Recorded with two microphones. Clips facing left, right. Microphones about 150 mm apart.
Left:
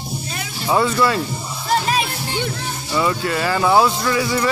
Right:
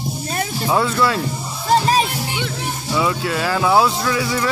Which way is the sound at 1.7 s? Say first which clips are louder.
Right 4 dB; 40° right (ahead or behind).